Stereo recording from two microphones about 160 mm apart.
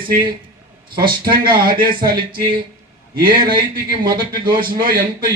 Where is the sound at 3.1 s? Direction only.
65° right (ahead or behind).